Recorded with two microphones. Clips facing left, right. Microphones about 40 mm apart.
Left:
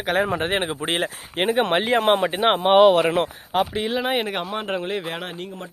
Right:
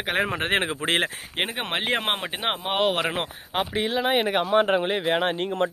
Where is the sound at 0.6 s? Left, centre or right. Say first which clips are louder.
Even; right.